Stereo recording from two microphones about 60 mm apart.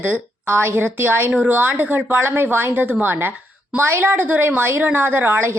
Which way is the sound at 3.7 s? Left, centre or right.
Right.